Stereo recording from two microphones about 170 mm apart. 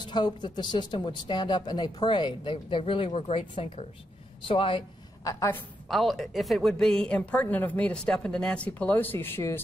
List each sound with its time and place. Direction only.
0.0 s a woman's voice: 25° left (ahead or behind)
5.9 s a woman's voice: centre (ahead or behind)